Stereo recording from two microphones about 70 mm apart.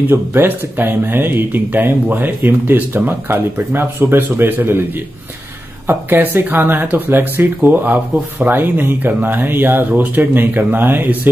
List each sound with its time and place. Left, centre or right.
0.0 s speech: right